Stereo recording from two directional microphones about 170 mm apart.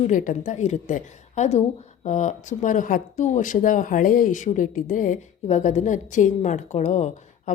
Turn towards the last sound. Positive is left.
turn(degrees=45)  # may be behind; listen again after turning